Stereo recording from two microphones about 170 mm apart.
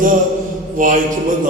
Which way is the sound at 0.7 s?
50° right (ahead or behind).